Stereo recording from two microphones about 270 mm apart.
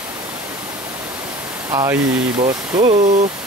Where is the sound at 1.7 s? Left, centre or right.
Centre.